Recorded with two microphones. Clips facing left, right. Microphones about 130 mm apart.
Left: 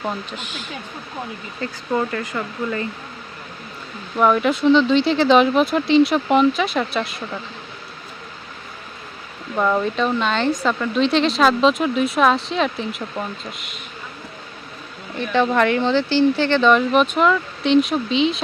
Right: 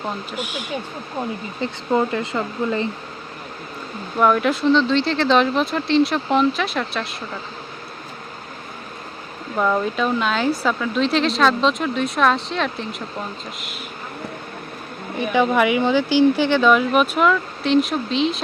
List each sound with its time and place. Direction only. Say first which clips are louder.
0.3 s speech: right 4 dB; 10° right (ahead or behind)
1.6 s speech: right 2 dB; 20° right (ahead or behind)
4.2 s speech: left 1 dB; centre (ahead or behind)
9.6 s speech: left 1 dB; centre (ahead or behind)
15.2 s speech: even; 10° right (ahead or behind)